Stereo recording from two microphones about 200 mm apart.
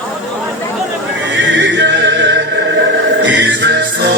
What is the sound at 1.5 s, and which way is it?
Music, 60° right (ahead or behind).